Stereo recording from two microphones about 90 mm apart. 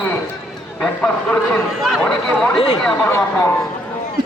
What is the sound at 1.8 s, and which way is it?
Speech, centre (ahead or behind).